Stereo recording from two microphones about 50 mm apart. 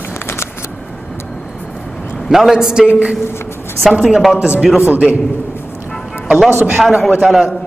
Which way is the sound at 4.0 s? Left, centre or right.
Centre.